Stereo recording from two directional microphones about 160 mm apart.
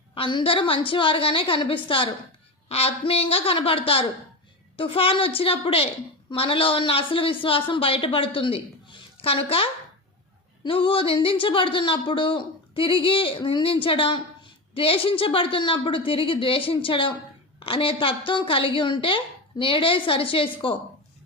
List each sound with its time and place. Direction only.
0.1 s speech: 30° left (ahead or behind)